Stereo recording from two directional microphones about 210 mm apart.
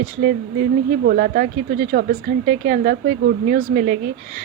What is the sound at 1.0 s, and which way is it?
Speech, 45° right (ahead or behind).